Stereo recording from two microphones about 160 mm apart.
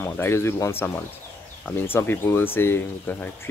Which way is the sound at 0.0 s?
15° left (ahead or behind).